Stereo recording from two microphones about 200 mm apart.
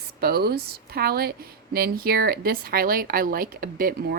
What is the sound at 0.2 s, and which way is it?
A woman's voice, 50° right (ahead or behind).